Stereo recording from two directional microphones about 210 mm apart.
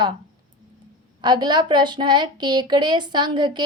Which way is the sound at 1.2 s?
20° right (ahead or behind).